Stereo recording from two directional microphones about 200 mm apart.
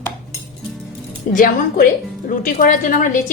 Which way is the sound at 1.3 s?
45° left (ahead or behind).